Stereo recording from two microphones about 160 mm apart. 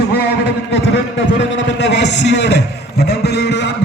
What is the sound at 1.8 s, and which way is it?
A man's voice, 90° left.